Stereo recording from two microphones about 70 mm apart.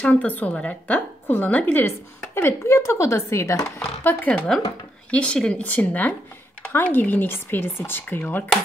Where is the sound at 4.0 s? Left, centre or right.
Left.